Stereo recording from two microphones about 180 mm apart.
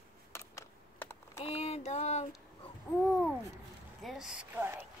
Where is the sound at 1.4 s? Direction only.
35° left (ahead or behind).